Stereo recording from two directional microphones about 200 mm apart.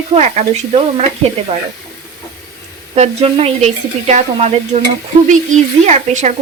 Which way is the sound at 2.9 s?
30° right (ahead or behind).